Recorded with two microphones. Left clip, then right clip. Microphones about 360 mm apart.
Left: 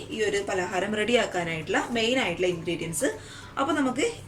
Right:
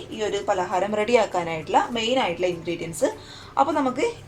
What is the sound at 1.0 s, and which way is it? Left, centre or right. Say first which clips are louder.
A woman's voice: right 4 dB; centre.